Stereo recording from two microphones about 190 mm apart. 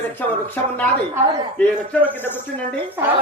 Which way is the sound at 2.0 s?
10° left (ahead or behind).